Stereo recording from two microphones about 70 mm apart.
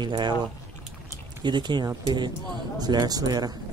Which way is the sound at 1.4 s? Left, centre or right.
Right.